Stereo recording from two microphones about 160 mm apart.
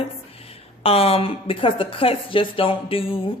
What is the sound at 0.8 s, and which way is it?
A woman's voice, 35° left (ahead or behind).